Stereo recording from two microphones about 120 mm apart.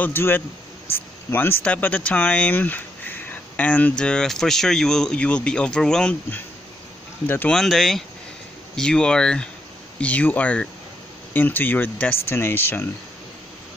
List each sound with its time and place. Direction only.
0.0 s speech: 20° left (ahead or behind)
7.2 s speech: 15° left (ahead or behind)
7.5 s speech: centre (ahead or behind); by 12.8 s 20° left (ahead or behind)